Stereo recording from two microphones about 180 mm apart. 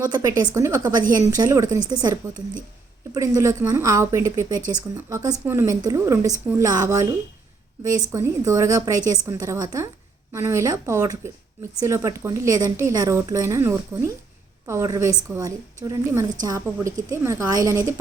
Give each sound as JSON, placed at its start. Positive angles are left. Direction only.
{"t": 0.0, "sound": "a woman's voice", "side_deg": -20}
{"t": 3.2, "sound": "a woman's voice", "side_deg": -15}